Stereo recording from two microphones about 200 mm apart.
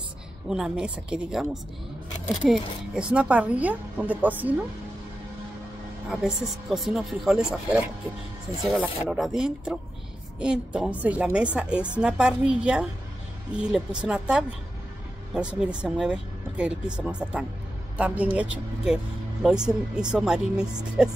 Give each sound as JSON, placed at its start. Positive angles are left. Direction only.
{"t": 0.5, "sound": "a woman's voice", "side_deg": -5}
{"t": 6.0, "sound": "a woman's voice", "side_deg": -5}
{"t": 8.8, "sound": "a woman's voice", "side_deg": -5}